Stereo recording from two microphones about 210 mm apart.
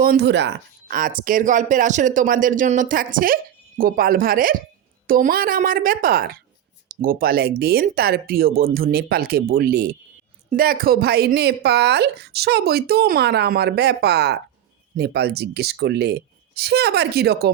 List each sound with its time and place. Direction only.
0.0 s speech: 50° right (ahead or behind)